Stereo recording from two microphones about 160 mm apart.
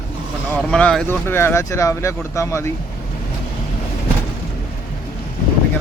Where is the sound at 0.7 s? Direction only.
5° left (ahead or behind).